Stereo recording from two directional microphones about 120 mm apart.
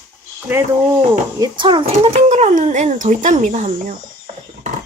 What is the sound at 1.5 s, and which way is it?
Speech, 45° right (ahead or behind).